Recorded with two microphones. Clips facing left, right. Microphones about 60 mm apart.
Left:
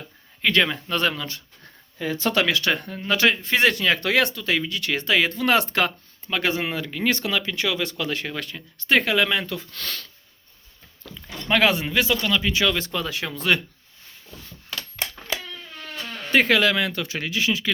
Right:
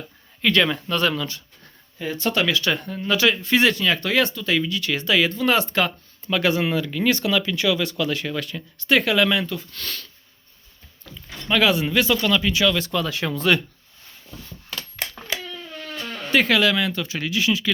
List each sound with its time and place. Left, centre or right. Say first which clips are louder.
0.4 s speech: right 1 dB; centre
0.9 s speech: right 1 dB; left
2.0 s speech: even; left
2.5 s speech: even; left
5.4 s speech: even; left
6.2 s speech: right 4 dB; left
9.5 s speech: even; left
11.4 s speech: right 1 dB; left
11.9 s speech: right 2 dB; centre
12.5 s speech: right 2 dB; left
12.9 s speech: right 3 dB; centre
13.1 s speech: right 5 dB; centre
16.3 s speech: even; left
17.2 s speech: right 2 dB; left